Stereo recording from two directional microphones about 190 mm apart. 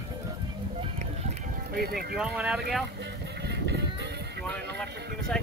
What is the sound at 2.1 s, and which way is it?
Speech, 5° right (ahead or behind).